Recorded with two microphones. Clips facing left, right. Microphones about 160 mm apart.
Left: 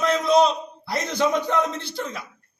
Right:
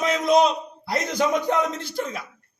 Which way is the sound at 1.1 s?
10° right (ahead or behind).